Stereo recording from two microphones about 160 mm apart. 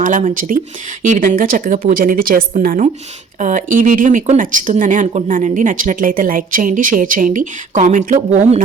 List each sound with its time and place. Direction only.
0.0 s speech: 55° right (ahead or behind)